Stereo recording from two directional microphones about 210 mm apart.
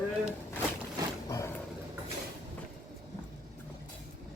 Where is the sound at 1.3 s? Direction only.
15° left (ahead or behind).